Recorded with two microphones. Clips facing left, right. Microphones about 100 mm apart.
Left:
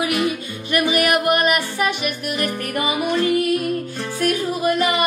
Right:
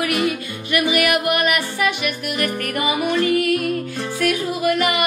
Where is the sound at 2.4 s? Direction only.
25° left (ahead or behind).